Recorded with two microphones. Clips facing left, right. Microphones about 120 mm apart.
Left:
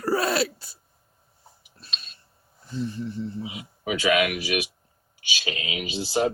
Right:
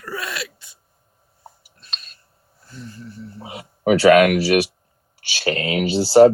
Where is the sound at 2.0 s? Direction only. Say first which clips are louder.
Even; 25° left (ahead or behind).